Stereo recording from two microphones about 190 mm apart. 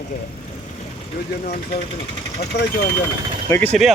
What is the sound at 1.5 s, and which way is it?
Speech, 50° left (ahead or behind).